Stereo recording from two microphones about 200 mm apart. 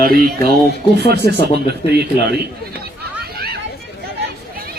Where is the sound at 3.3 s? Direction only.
50° right (ahead or behind).